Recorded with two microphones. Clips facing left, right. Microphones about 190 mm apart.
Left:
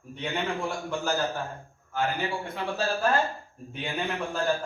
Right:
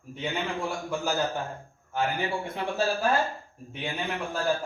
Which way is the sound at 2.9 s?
15° right (ahead or behind).